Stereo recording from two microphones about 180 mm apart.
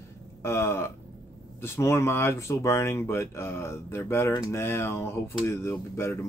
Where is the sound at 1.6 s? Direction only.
15° left (ahead or behind).